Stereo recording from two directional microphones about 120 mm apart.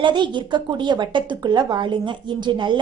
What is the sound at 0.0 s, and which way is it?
A woman's voice, 40° right (ahead or behind).